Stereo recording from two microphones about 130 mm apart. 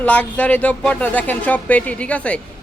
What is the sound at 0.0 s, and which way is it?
Speech, 10° left (ahead or behind).